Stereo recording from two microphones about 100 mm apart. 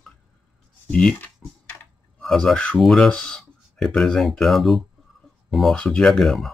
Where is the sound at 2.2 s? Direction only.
5° left (ahead or behind).